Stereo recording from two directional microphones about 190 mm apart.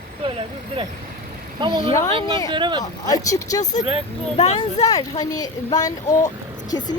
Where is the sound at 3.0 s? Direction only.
20° left (ahead or behind).